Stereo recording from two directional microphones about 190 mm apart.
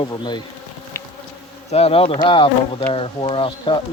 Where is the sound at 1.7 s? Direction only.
30° left (ahead or behind).